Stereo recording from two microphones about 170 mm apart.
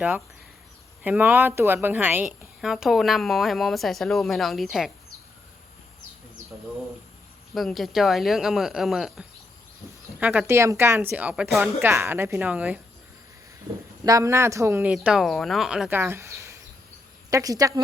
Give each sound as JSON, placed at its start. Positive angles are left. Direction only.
{"t": 1.0, "sound": "speech", "side_deg": -10}
{"t": 7.5, "sound": "speech", "side_deg": 0}
{"t": 14.0, "sound": "speech", "side_deg": -20}
{"t": 14.9, "sound": "speech", "side_deg": 0}
{"t": 15.9, "sound": "a sound", "side_deg": -15}
{"t": 17.3, "sound": "speech", "side_deg": -20}